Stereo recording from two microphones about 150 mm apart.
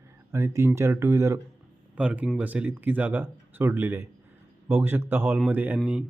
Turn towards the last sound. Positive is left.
turn(degrees=-10)  # may be behind; listen again after turning